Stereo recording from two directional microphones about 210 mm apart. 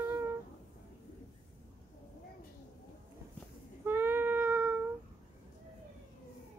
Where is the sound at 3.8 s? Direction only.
10° right (ahead or behind).